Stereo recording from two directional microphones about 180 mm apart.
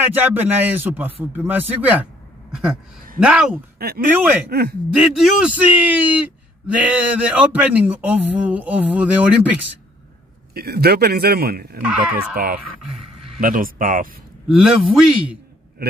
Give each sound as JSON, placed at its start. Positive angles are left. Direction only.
{"t": 0.0, "sound": "a man's voice", "side_deg": -10}
{"t": 3.8, "sound": "a man's voice", "side_deg": -60}
{"t": 4.9, "sound": "speech", "side_deg": -5}
{"t": 10.5, "sound": "a man's voice", "side_deg": -60}
{"t": 11.8, "sound": "a man's voice", "side_deg": -5}
{"t": 13.4, "sound": "speech", "side_deg": -50}
{"t": 14.5, "sound": "a man's voice", "side_deg": -5}